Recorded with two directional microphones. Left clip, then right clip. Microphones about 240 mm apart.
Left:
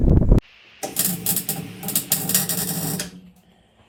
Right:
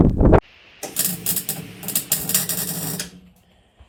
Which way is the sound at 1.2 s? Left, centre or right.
Centre.